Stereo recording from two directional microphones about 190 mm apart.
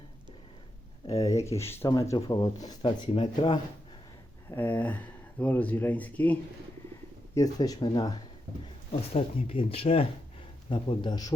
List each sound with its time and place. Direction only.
1.2 s speech: 15° left (ahead or behind)
4.4 s speech: 10° left (ahead or behind)
7.3 s speech: 20° left (ahead or behind)